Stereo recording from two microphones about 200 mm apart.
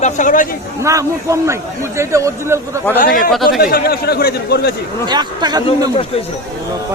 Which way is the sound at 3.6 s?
50° left (ahead or behind).